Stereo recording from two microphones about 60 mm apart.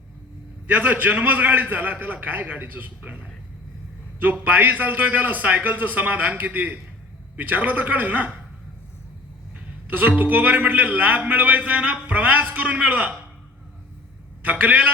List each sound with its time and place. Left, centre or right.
0.7 s a man's voice: right
9.6 s a man's voice: right
14.4 s a man's voice: right